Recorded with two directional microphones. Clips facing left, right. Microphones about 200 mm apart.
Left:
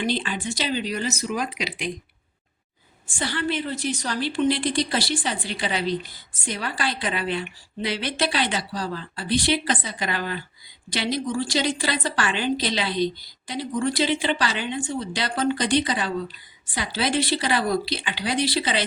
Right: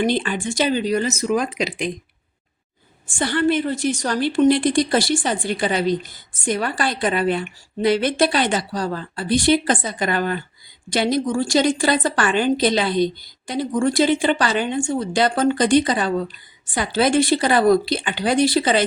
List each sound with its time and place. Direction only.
0.0 s a woman's voice: 50° right (ahead or behind)
3.1 s a woman's voice: 50° right (ahead or behind)